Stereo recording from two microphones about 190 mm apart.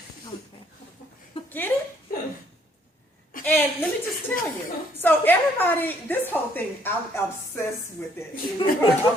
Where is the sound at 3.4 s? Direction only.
10° left (ahead or behind).